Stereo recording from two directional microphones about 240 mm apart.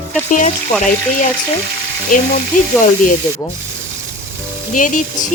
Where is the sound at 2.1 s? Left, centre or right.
Left.